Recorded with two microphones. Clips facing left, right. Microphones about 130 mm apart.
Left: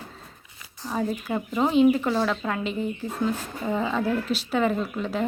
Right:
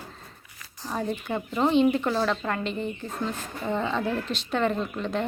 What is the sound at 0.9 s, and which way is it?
Speech, centre (ahead or behind).